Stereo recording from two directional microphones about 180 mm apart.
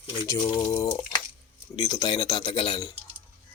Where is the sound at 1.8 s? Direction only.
25° left (ahead or behind).